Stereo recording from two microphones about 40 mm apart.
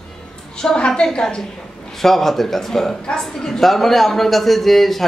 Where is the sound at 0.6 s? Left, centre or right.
Centre.